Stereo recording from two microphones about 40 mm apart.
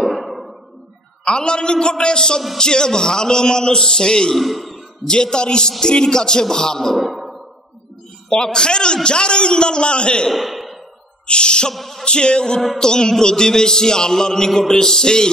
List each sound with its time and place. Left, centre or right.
0.0 s a sound: centre
1.2 s a man's voice: left
4.4 s a man's voice: centre
5.0 s a man's voice: centre
8.3 s a man's voice: centre
10.3 s sigh: centre
11.2 s a man's voice: left
11.7 s a sound: centre
12.0 s a man's voice: left